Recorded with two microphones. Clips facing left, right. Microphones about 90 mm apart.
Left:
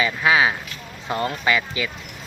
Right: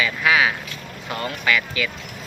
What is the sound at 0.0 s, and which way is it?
Speech, 25° left (ahead or behind).